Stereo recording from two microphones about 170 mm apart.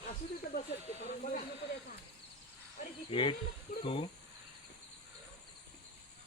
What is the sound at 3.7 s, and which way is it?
Speech, 55° left (ahead or behind).